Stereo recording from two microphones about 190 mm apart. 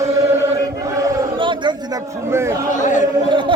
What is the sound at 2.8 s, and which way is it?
Chant, 40° left (ahead or behind).